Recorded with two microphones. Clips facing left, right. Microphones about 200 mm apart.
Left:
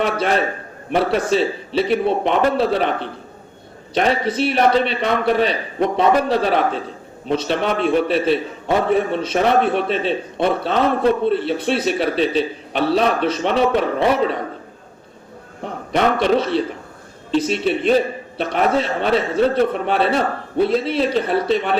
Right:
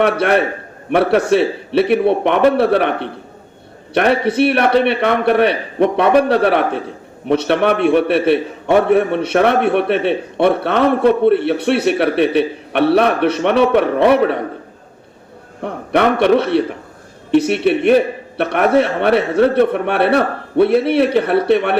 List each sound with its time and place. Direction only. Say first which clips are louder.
0.0 s a man's voice: right 5 dB; 65° right (ahead or behind)
15.6 s a man's voice: right 4 dB; 65° right (ahead or behind)